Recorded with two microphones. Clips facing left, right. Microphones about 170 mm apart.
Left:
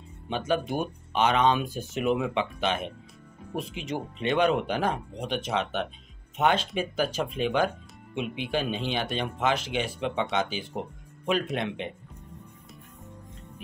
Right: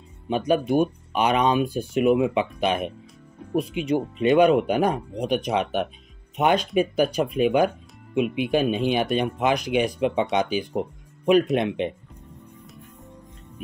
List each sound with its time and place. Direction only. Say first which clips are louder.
0.3 s speech: right 6 dB; 15° right (ahead or behind)